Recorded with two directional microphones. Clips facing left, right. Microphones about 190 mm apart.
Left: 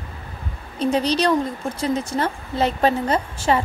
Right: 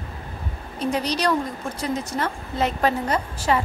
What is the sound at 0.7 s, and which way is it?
A woman's voice, 30° left (ahead or behind).